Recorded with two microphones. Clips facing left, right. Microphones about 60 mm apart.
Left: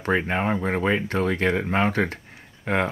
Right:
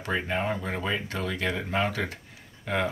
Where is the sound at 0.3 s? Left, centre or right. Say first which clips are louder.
Left 5 dB; left.